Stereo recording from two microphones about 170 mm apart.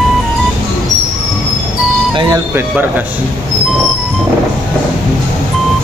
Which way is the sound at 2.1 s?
25° right (ahead or behind).